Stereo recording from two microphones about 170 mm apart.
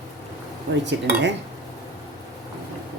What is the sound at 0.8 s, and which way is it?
Speech, 90° right.